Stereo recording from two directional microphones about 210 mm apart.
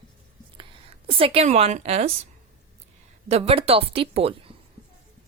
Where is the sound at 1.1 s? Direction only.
25° right (ahead or behind).